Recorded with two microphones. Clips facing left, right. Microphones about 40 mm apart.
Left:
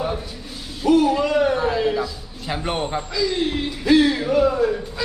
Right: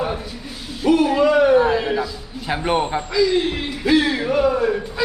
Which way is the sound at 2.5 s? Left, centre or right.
Centre.